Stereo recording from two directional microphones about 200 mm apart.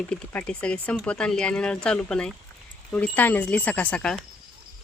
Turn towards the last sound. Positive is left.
turn(degrees=5)  # may be behind; listen again after turning